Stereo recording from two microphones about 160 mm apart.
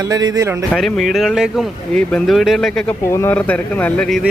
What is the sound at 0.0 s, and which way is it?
Speech, 25° right (ahead or behind).